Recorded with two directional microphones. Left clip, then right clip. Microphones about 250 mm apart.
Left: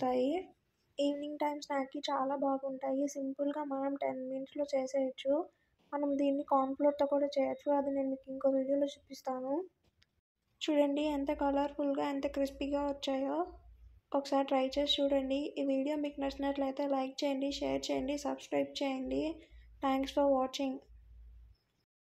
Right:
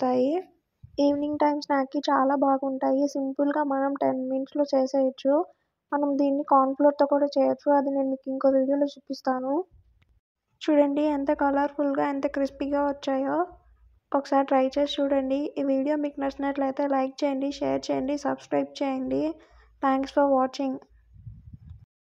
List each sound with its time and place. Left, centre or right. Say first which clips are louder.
0.0 s speech: right 8 dB; right
10.6 s speech: right 9 dB; right